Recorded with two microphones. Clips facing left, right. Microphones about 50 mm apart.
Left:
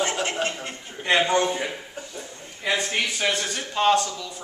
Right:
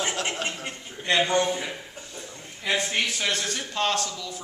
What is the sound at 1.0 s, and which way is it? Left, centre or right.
Speech, centre.